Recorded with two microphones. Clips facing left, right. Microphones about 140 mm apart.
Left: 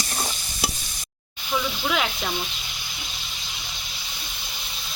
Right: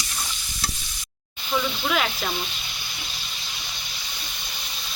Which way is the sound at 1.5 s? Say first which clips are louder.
Right 1 dB; 5° left (ahead or behind).